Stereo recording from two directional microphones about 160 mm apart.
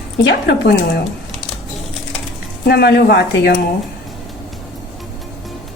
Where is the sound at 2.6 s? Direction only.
90° left.